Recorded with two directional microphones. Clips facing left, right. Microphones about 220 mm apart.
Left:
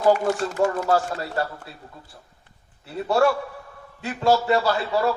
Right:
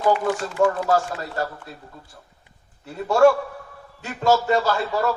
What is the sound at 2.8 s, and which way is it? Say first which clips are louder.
A man's voice: right 4 dB; 45° right (ahead or behind).